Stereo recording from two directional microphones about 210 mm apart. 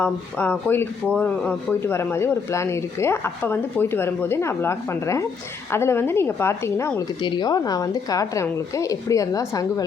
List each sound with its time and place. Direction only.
0.0 s speech: 5° left (ahead or behind)